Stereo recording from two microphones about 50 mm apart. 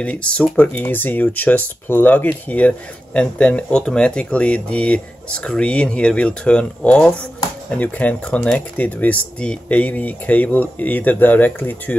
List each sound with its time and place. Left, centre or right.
0.0 s speech: left
0.8 s speech: left